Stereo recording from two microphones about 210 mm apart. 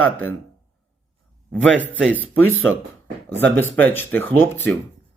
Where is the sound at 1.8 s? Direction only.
10° right (ahead or behind).